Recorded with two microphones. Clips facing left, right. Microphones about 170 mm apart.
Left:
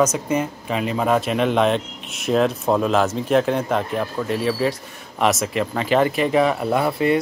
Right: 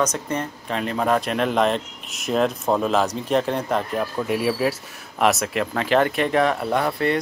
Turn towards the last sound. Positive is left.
turn(degrees=10)  # may be behind; listen again after turning